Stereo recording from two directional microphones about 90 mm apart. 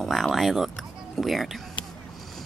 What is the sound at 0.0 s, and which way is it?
Speech, centre (ahead or behind).